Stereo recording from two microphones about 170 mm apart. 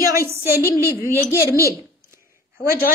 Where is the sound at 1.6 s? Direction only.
15° right (ahead or behind).